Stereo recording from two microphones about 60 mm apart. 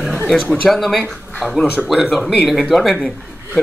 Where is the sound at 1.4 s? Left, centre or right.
Centre.